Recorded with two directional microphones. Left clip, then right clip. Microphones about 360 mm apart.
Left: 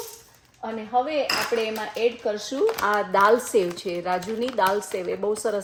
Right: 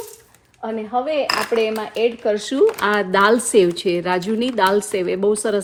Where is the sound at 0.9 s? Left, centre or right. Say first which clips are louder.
Right 3 dB; right.